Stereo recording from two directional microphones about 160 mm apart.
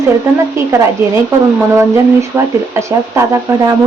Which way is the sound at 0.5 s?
20° right (ahead or behind).